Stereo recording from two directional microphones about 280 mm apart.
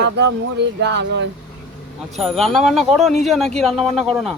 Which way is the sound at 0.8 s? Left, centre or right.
Right.